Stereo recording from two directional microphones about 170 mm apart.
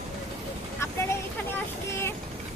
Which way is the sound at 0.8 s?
15° left (ahead or behind).